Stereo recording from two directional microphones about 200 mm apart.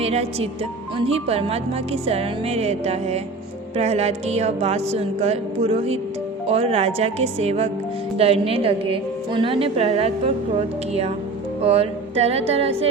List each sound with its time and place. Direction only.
0.0 s a woman's voice: 30° right (ahead or behind)
11.6 s speech: 30° right (ahead or behind)